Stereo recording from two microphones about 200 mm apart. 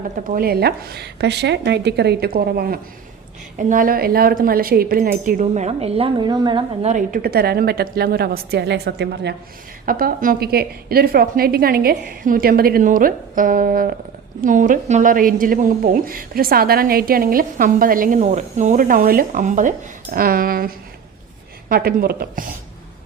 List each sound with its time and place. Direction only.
0.3 s a woman's voice: 50° right (ahead or behind); by 6.6 s 20° right (ahead or behind)
6.8 s a woman's voice: 40° right (ahead or behind)